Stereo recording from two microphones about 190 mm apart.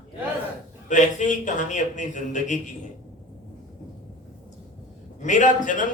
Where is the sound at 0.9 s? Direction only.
40° left (ahead or behind).